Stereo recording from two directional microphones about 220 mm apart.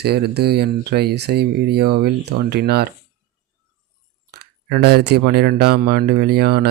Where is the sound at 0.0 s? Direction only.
45° right (ahead or behind).